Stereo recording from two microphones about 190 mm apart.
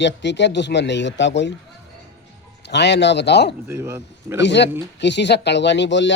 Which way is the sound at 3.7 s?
15° right (ahead or behind).